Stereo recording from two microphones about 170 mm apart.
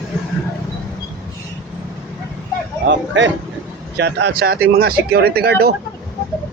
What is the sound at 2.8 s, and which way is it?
Speech, 90° right.